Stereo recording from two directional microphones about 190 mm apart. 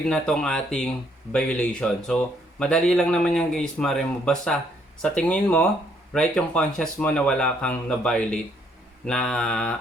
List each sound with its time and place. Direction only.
0.1 s speech: 5° left (ahead or behind)